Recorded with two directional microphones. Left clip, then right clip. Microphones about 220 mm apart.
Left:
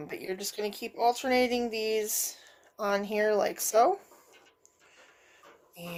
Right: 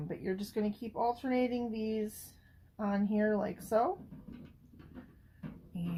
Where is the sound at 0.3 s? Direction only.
45° left (ahead or behind).